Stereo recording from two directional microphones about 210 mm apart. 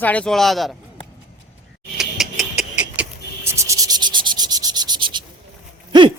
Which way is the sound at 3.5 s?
15° right (ahead or behind).